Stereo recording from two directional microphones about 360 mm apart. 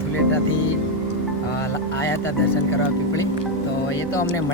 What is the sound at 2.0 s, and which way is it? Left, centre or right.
Speech, centre.